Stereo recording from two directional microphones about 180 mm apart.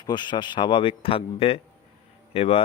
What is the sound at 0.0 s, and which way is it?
Speech, 25° left (ahead or behind).